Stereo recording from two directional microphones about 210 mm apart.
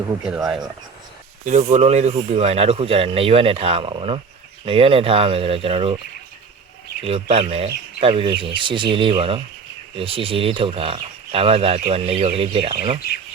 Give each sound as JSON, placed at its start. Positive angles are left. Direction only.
{"t": 0.3, "sound": "speech", "side_deg": -5}
{"t": 1.5, "sound": "speech", "side_deg": -35}
{"t": 7.0, "sound": "speech", "side_deg": -25}